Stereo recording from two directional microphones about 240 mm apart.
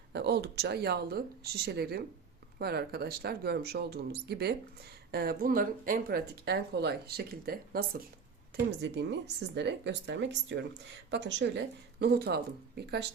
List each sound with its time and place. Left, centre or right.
0.1 s speech: right